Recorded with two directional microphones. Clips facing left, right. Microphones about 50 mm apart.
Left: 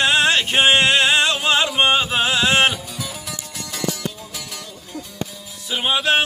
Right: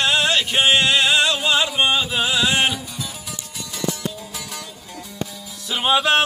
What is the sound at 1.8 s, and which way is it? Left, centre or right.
Chant, left.